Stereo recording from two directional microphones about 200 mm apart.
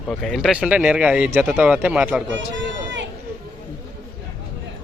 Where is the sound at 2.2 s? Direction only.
65° right (ahead or behind).